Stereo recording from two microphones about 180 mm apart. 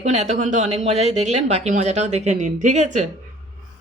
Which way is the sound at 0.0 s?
40° right (ahead or behind).